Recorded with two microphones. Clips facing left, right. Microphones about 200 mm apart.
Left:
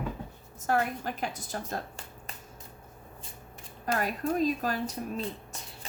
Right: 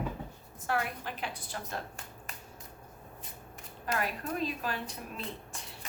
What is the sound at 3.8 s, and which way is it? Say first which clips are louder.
Speech: left 5 dB; 40° left (ahead or behind).